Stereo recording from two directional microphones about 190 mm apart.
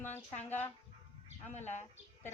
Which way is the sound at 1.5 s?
35° left (ahead or behind).